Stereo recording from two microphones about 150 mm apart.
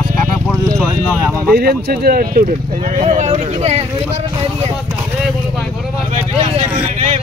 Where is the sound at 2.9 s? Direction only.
55° right (ahead or behind).